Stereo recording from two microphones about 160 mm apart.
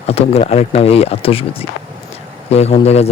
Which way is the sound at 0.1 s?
40° left (ahead or behind).